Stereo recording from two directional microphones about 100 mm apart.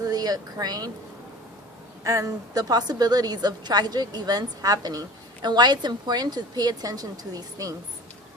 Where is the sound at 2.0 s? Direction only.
35° right (ahead or behind).